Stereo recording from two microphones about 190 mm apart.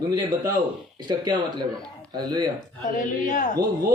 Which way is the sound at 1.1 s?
25° right (ahead or behind).